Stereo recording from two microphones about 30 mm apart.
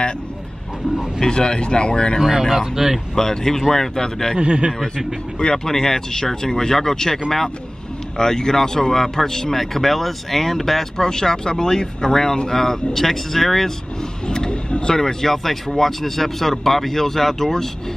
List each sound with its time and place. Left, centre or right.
1.2 s speech: left
2.6 s speech: centre
3.2 s speech: centre
4.4 s a man's voice: right
4.9 s speech: left
8.2 s speech: left
14.2 s a sound: left
14.5 s vehicle: left
14.9 s speech: centre